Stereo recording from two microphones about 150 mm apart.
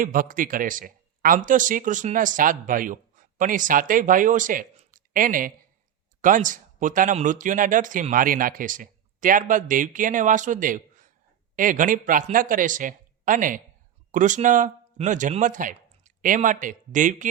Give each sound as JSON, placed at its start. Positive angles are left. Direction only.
{"t": 0.0, "sound": "speech", "side_deg": -65}